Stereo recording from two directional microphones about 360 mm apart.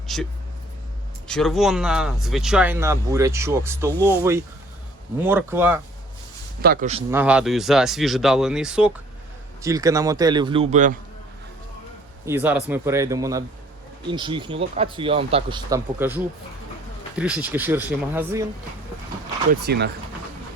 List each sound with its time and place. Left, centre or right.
0.1 s speech: centre
1.3 s speech: centre
6.6 s a man's voice: right
7.1 s speech: centre
12.2 s speech: centre
19.5 s a man's voice: right